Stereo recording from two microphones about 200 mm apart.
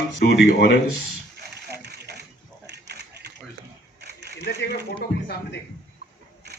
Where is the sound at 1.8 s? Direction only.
55° right (ahead or behind).